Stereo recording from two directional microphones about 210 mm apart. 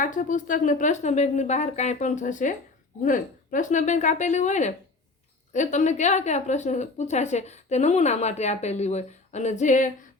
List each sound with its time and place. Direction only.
0.0 s a woman's voice: 40° left (ahead or behind)